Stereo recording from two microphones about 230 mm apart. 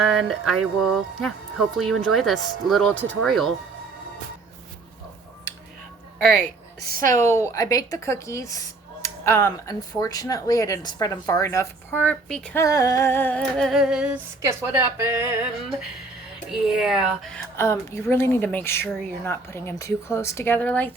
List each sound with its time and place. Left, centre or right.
0.3 s speech: centre
6.2 s a woman's voice: right
7.5 s speech: centre
16.5 s speech: centre